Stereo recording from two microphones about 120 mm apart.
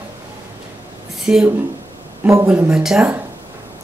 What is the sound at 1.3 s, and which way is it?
Speech, 10° right (ahead or behind).